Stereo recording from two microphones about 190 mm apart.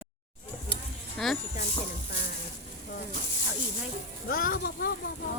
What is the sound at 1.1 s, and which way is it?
Speech, centre (ahead or behind).